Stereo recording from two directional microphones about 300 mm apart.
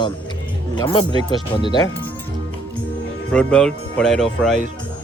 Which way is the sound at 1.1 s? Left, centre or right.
Centre.